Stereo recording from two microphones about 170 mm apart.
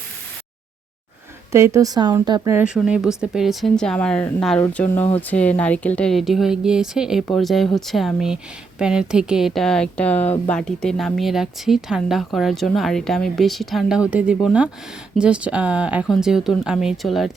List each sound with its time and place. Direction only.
1.5 s speech: 15° right (ahead or behind)
2.6 s speech: 5° right (ahead or behind)